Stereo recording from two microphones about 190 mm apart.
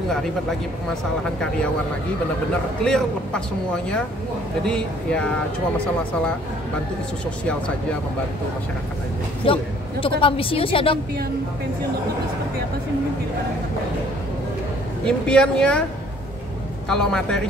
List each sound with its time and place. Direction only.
2.8 s speech: 5° left (ahead or behind)
9.5 s a woman's voice: 30° left (ahead or behind)
15.0 s speech: 5° left (ahead or behind)
16.9 s speech: 5° left (ahead or behind)